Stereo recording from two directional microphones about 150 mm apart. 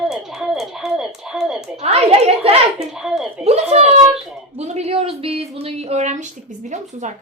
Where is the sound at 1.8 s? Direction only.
40° right (ahead or behind).